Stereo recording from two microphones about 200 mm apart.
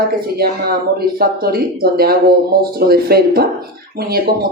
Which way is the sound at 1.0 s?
50° right (ahead or behind).